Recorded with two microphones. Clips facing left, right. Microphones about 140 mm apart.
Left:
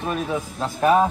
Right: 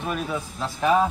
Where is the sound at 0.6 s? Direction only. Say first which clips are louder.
Left 3 dB; 45° left (ahead or behind).